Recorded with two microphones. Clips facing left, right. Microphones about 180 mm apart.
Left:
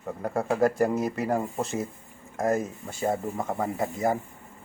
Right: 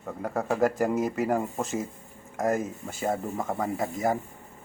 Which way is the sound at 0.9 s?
15° right (ahead or behind).